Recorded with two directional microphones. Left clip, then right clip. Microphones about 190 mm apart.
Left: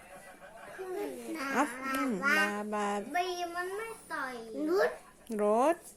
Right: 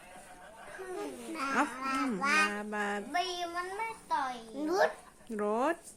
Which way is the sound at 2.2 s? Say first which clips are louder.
Even; 20° right (ahead or behind).